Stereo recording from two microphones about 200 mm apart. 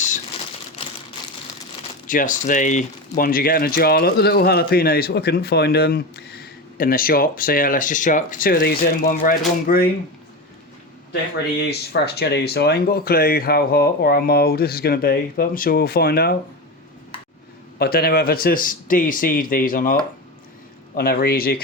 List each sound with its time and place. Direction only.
2.0 s speech: 40° left (ahead or behind)
11.7 s speech: 55° left (ahead or behind)
17.7 s speech: 50° left (ahead or behind)